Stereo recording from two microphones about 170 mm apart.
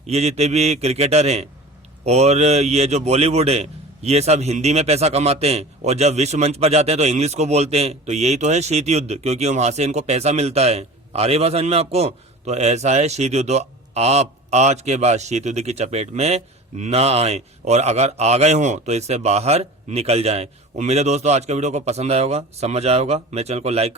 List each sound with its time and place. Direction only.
0.0 s a man's voice: 40° right (ahead or behind)